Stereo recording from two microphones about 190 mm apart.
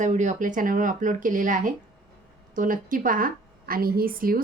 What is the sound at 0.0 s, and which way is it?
A woman's voice, 40° right (ahead or behind).